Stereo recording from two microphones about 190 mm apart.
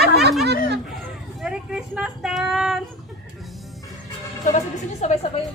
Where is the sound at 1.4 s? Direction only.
5° right (ahead or behind).